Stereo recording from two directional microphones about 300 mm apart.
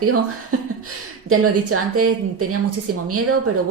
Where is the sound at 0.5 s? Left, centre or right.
Right.